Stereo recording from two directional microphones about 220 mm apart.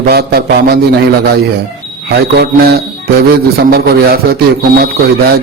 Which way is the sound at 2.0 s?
50° right (ahead or behind).